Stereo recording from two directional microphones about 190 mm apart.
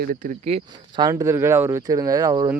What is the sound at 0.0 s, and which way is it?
Speech, 45° right (ahead or behind).